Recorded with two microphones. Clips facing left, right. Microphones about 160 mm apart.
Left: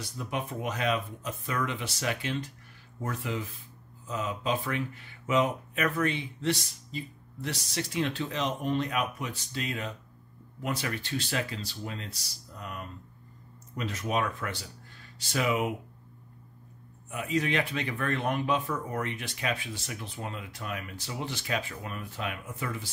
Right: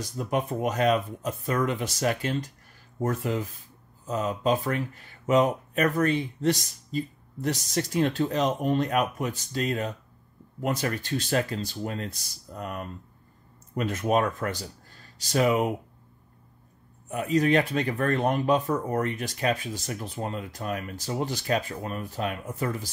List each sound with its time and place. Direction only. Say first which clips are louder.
0.0 s speech: right 6 dB; 45° right (ahead or behind)
17.1 s speech: right 7 dB; 40° right (ahead or behind)